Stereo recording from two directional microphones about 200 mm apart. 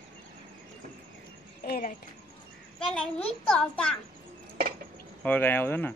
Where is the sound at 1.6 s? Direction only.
45° left (ahead or behind).